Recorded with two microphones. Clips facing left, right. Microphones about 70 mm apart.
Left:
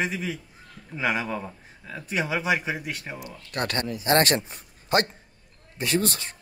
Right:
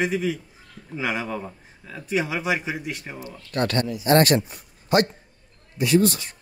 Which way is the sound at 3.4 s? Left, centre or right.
Left.